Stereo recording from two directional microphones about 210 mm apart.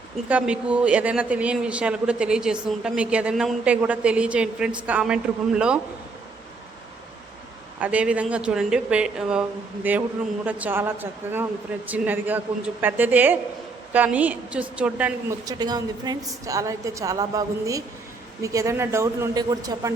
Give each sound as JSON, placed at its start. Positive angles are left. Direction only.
{"t": 0.3, "sound": "a man's voice", "side_deg": -5}
{"t": 7.8, "sound": "a man's voice", "side_deg": -5}
{"t": 15.4, "sound": "a woman's voice", "side_deg": -20}